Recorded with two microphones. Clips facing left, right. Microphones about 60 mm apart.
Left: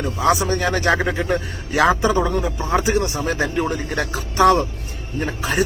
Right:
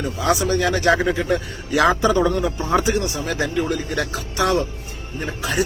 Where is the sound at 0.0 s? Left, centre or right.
Left.